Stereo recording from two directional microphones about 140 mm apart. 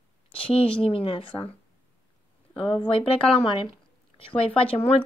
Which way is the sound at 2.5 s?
40° left (ahead or behind).